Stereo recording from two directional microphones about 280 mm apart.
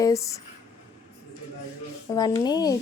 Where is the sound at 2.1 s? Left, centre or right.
Centre.